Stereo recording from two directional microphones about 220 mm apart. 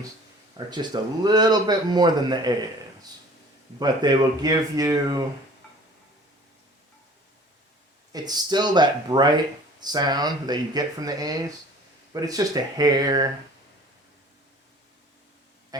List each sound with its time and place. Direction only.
0.5 s speech: 20° right (ahead or behind)
3.8 s speech: 20° right (ahead or behind)
8.1 s speech: 20° right (ahead or behind)
15.7 s a man's voice: 15° right (ahead or behind)